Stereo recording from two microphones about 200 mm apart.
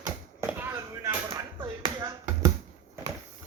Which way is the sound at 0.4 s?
10° right (ahead or behind).